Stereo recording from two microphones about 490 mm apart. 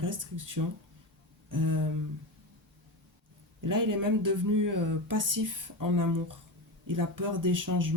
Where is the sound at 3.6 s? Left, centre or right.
Right.